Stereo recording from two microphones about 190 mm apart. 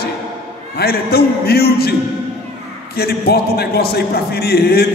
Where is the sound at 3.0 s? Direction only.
55° left (ahead or behind).